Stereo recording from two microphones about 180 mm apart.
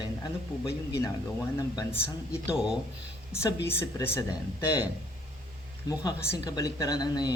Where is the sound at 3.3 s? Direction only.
15° left (ahead or behind).